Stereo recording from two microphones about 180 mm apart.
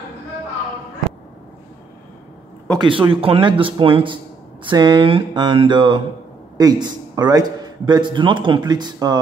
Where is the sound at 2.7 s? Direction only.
25° right (ahead or behind).